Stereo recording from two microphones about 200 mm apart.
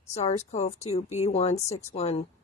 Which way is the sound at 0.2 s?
35° left (ahead or behind).